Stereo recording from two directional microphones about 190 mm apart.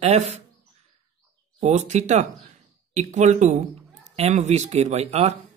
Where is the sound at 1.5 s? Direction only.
35° right (ahead or behind).